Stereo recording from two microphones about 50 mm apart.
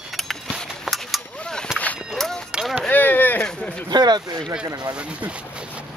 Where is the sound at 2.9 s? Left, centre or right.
Left.